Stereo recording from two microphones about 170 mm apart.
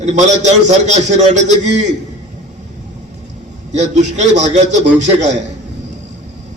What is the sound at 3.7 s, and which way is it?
A man's voice, 45° right (ahead or behind).